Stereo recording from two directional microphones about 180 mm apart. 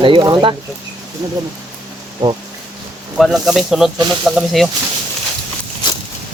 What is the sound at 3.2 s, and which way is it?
Speech, centre (ahead or behind).